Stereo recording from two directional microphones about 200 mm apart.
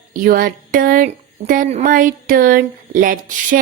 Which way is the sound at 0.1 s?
45° right (ahead or behind).